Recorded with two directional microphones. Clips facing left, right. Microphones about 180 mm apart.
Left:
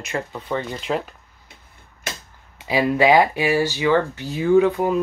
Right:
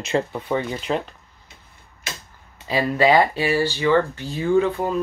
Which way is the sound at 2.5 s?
10° left (ahead or behind).